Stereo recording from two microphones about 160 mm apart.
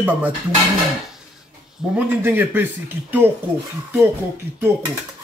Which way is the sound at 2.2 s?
15° right (ahead or behind).